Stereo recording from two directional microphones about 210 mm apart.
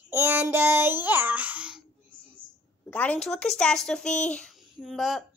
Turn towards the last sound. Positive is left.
turn(degrees=0)  # may be behind; listen again after turning